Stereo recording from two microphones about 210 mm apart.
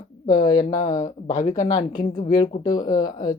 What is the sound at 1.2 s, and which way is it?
Speech, 20° left (ahead or behind).